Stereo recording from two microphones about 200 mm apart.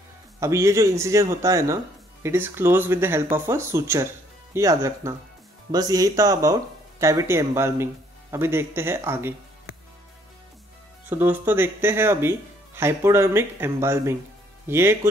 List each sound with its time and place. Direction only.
0.4 s speech: 15° right (ahead or behind)
11.1 s speech: 10° right (ahead or behind)